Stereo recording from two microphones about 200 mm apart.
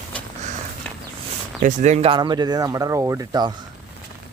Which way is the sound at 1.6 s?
35° right (ahead or behind).